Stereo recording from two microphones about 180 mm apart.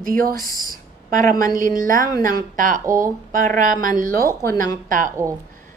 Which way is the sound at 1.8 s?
45° right (ahead or behind).